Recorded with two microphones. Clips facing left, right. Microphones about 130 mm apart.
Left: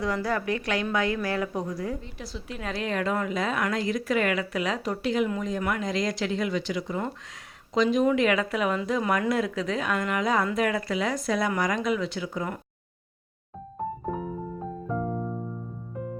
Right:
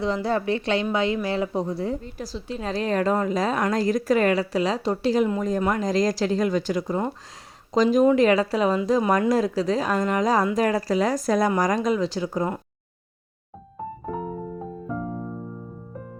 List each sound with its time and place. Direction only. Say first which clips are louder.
0.0 s a woman's voice: right 4 dB; 25° right (ahead or behind)